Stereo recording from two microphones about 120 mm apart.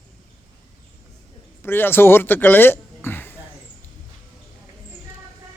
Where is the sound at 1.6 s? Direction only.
20° left (ahead or behind).